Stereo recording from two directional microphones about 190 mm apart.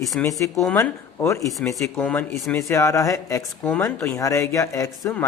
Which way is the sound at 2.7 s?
15° left (ahead or behind).